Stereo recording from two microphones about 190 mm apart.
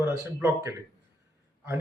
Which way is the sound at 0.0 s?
10° right (ahead or behind).